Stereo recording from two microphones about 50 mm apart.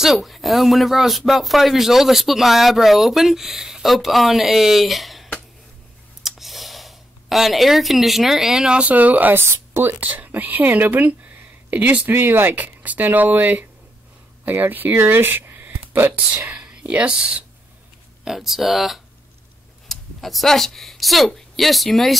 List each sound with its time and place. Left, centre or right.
0.0 s speech: centre
6.2 s a sound: centre
8.6 s speech: right
8.9 s speech: right
9.4 s speech: right
9.9 s speech: right
12.1 s speech: right
12.5 s speech: right
15.6 s a sound: right
16.4 s speech: right
18.2 s speech: centre